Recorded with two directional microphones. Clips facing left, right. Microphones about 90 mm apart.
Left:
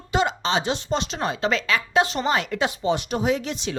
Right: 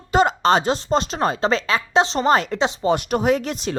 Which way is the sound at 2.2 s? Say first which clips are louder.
Right 6 dB; 40° right (ahead or behind).